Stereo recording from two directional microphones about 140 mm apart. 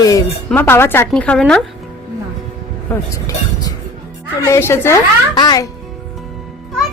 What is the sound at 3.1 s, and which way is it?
A woman's voice, 25° left (ahead or behind).